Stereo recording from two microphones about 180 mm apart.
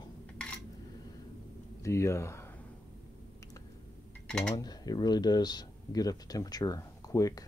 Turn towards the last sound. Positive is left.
turn(degrees=20)  # may be behind; listen again after turning